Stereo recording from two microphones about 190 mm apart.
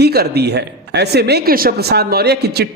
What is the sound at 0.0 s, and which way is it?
Speech, 55° right (ahead or behind).